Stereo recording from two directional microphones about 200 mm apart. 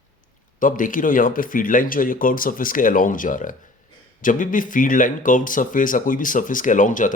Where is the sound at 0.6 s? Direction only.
40° left (ahead or behind).